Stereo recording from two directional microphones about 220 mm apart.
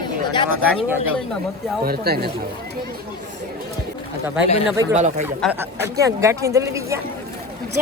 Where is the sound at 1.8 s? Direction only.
45° right (ahead or behind).